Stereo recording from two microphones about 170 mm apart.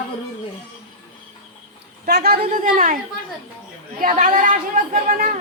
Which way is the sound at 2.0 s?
70° right (ahead or behind).